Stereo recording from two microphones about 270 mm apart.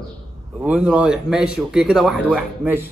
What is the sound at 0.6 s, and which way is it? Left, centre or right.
A man's voice, centre.